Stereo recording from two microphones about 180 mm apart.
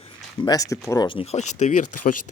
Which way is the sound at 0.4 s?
20° left (ahead or behind).